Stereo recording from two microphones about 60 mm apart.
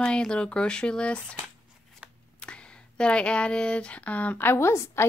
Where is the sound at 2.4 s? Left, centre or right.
Centre.